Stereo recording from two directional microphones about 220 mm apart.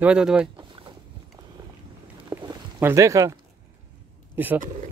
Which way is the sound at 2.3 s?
15° right (ahead or behind).